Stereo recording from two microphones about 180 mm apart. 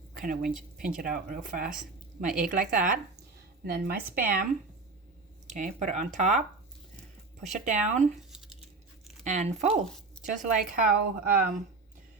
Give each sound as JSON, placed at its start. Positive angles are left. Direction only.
{"t": 0.1, "sound": "speech", "side_deg": -50}
{"t": 5.5, "sound": "speech", "side_deg": -45}
{"t": 7.4, "sound": "speech", "side_deg": -40}
{"t": 8.3, "sound": "a sound", "side_deg": -5}
{"t": 9.2, "sound": "speech", "side_deg": -40}